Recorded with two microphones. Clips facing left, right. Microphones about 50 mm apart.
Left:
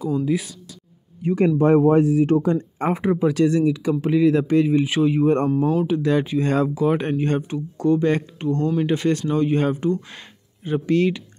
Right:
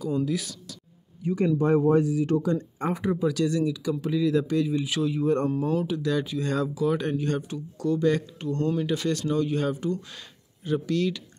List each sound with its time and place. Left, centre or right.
0.1 s speech: left
1.2 s speech: left